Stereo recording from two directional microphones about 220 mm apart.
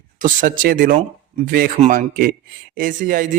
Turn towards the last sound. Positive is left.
turn(degrees=-40)  # may be behind; listen again after turning